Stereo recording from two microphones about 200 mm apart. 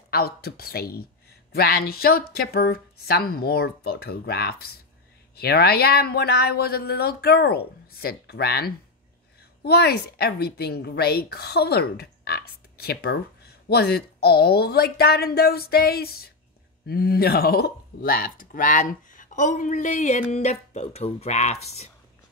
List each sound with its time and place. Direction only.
0.1 s speech: 50° left (ahead or behind); by 21.5 s 35° left (ahead or behind)